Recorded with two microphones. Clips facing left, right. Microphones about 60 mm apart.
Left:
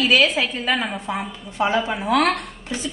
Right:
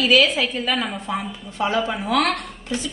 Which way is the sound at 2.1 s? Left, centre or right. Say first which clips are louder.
Left 2 dB; centre.